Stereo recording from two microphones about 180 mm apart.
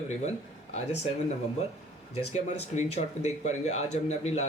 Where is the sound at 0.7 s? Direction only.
35° left (ahead or behind).